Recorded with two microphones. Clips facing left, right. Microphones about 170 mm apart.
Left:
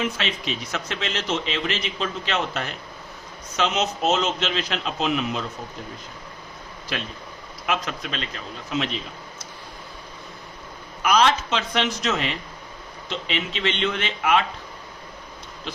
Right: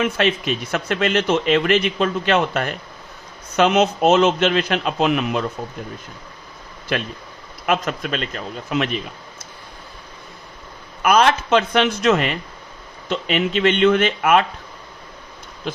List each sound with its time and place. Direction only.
0.0 s a man's voice: 55° right (ahead or behind)
7.7 s a man's voice: 50° right (ahead or behind)
11.0 s a man's voice: 55° right (ahead or behind)